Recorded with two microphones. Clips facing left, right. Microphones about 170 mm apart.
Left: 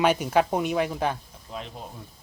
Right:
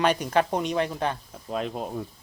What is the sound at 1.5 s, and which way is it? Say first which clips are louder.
Speech: right 8 dB; 60° right (ahead or behind).